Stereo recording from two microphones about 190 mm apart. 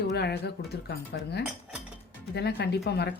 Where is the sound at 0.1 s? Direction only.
60° left (ahead or behind).